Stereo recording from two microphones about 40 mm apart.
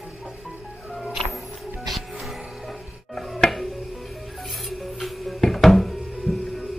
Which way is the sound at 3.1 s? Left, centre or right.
Centre.